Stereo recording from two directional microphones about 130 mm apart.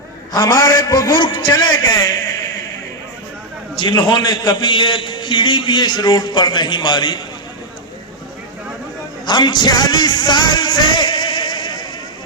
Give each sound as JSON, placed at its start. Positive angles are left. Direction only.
{"t": 0.3, "sound": "a man's voice", "side_deg": 30}
{"t": 3.8, "sound": "a man's voice", "side_deg": 40}
{"t": 9.2, "sound": "music", "side_deg": 35}